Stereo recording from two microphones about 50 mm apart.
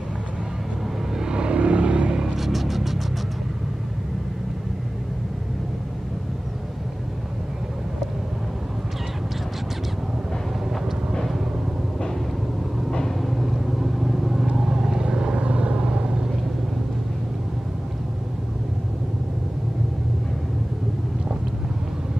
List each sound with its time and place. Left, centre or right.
1.2 s vehicle: centre
2.3 s music: centre
10.7 s vehicle: centre
13.2 s vehicle: centre